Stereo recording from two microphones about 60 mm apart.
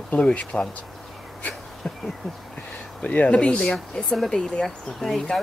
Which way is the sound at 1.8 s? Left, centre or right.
Centre.